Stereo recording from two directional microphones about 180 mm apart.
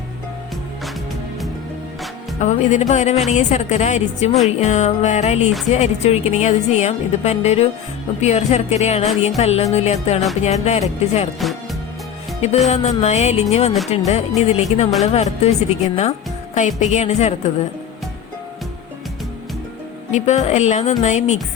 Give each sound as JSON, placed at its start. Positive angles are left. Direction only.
{"t": 2.4, "sound": "a woman's voice", "side_deg": 40}
{"t": 11.3, "sound": "music", "side_deg": 0}
{"t": 12.6, "sound": "a woman's voice", "side_deg": 40}
{"t": 20.1, "sound": "a woman's voice", "side_deg": 40}